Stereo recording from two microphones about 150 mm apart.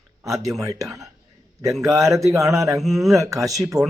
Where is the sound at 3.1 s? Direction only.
20° right (ahead or behind).